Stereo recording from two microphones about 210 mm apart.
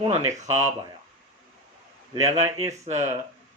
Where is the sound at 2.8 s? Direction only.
35° right (ahead or behind).